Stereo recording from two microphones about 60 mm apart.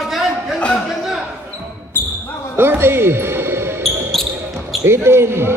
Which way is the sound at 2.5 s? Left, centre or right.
Right.